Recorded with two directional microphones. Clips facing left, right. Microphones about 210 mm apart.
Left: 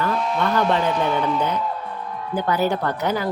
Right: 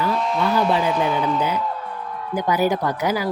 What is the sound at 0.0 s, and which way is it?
Speech, 5° right (ahead or behind).